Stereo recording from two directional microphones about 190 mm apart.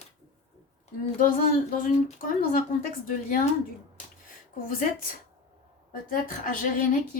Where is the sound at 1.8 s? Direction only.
45° left (ahead or behind).